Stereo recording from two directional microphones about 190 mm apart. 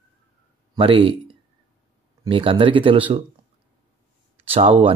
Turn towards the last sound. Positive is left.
turn(degrees=-30)  # may be behind; listen again after turning